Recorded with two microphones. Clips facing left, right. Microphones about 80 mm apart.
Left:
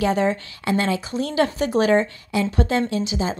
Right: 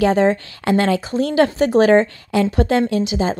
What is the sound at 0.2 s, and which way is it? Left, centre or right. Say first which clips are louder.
Speech: right 5 dB; right.